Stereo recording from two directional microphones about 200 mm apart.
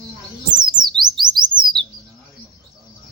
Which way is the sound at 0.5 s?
20° right (ahead or behind).